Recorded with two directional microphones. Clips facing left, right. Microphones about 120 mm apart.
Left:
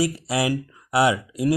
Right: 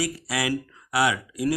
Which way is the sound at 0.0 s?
25° left (ahead or behind).